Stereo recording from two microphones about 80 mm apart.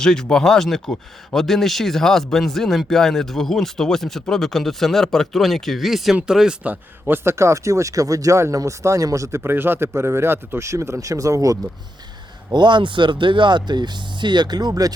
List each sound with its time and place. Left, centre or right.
0.0 s speech: centre
7.1 s speech: right
12.5 s speech: right